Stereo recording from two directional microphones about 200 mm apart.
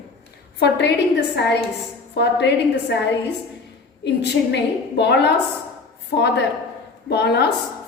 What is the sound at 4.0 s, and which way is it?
A woman's voice, 60° left (ahead or behind).